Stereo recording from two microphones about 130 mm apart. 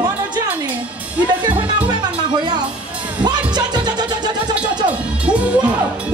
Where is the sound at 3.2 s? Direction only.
35° right (ahead or behind).